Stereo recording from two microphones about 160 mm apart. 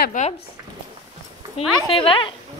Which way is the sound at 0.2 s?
55° left (ahead or behind).